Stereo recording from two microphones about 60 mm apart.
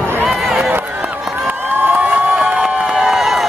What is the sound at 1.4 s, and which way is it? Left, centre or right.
Crowd, right.